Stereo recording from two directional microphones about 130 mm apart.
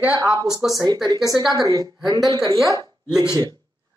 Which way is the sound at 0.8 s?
30° right (ahead or behind).